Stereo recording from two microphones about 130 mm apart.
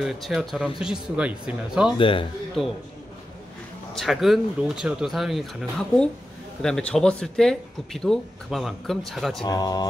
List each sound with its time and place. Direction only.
0.0 s speech: centre (ahead or behind)
2.0 s speech: 40° left (ahead or behind)
2.6 s speech: centre (ahead or behind)
3.9 s speech: centre (ahead or behind)
9.4 s speech: 30° left (ahead or behind)